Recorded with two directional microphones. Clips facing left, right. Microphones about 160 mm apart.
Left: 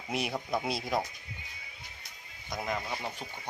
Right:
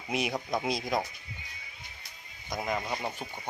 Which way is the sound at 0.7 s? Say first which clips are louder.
Right 2 dB; 5° left (ahead or behind).